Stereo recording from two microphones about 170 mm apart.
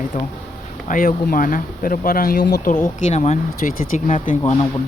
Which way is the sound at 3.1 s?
40° left (ahead or behind).